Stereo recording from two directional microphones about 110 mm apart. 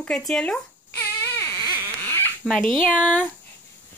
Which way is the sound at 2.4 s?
5° left (ahead or behind).